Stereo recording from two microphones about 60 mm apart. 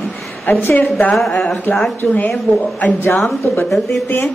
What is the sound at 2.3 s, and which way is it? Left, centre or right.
Speech, left.